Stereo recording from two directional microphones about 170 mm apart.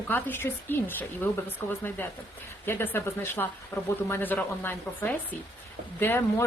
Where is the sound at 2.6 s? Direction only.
15° left (ahead or behind).